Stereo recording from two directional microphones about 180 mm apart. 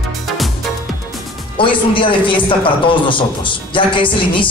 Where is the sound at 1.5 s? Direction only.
30° left (ahead or behind).